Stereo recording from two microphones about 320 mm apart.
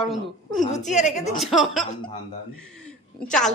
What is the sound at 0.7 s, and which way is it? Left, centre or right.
Speech, left.